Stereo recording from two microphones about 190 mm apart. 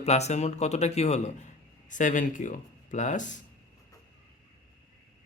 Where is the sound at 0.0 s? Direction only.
35° left (ahead or behind).